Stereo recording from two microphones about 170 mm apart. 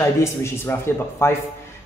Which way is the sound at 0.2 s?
15° left (ahead or behind).